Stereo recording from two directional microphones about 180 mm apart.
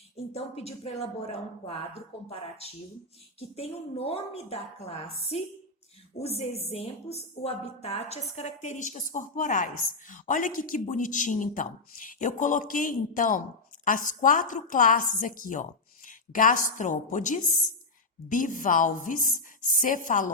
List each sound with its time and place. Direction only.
0.3 s a woman's voice: 35° left (ahead or behind)